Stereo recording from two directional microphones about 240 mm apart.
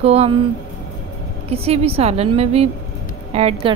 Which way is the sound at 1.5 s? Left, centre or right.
Right.